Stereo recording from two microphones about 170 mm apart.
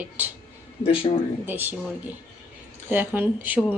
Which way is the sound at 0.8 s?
30° left (ahead or behind).